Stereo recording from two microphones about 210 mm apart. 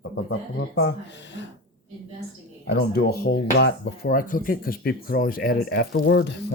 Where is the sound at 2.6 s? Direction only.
50° left (ahead or behind).